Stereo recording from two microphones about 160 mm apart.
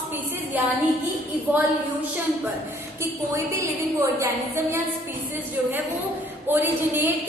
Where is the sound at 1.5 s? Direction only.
10° right (ahead or behind).